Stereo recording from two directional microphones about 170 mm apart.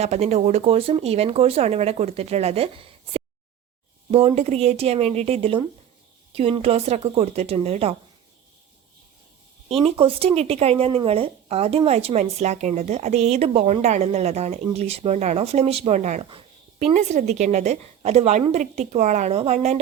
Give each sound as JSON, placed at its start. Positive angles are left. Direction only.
{"t": 0.0, "sound": "speech", "side_deg": -40}
{"t": 9.6, "sound": "speech", "side_deg": -35}